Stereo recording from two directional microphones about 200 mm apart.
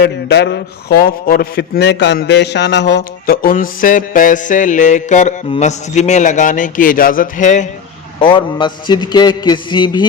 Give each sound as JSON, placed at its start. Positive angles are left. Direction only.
{"t": 0.0, "sound": "a man's voice", "side_deg": 55}
{"t": 8.2, "sound": "a man's voice", "side_deg": 25}